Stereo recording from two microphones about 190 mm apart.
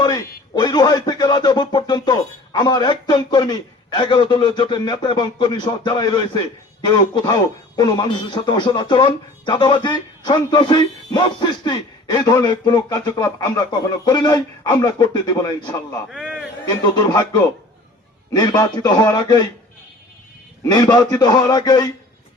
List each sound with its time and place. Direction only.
0.0 s speech: 20° left (ahead or behind)
16.0 s a sound: centre (ahead or behind)
16.6 s speech: 20° left (ahead or behind)
20.7 s speech: 20° left (ahead or behind)